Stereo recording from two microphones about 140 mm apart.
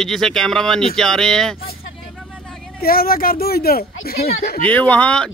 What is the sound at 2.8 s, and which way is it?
Speech, 90° left.